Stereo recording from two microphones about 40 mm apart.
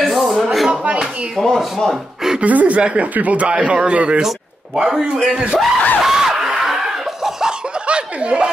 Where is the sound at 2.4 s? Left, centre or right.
Right.